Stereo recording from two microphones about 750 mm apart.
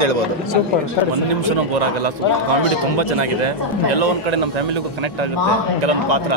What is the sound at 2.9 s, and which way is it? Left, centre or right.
A man's voice, right.